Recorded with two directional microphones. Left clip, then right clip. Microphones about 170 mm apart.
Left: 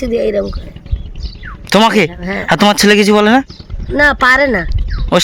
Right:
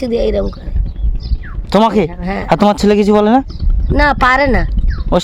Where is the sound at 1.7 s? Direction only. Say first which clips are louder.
Left 2 dB; 10° right (ahead or behind).